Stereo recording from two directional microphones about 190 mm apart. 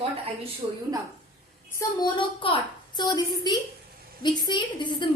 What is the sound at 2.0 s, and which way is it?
A woman's voice, 25° left (ahead or behind).